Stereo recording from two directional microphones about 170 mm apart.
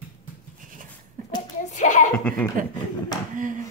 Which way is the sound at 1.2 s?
50° right (ahead or behind).